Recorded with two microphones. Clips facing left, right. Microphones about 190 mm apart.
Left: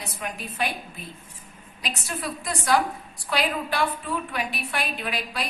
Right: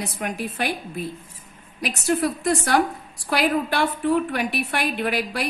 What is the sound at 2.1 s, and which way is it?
Speech, 50° right (ahead or behind).